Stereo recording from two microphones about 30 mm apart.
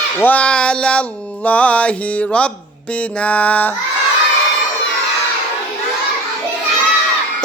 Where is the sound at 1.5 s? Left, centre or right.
Left.